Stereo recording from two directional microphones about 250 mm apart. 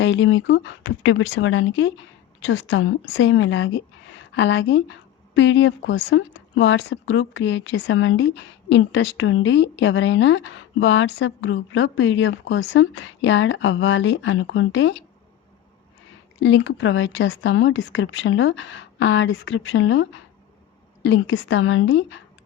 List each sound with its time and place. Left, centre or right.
0.0 s a woman's voice: left
16.4 s a woman's voice: left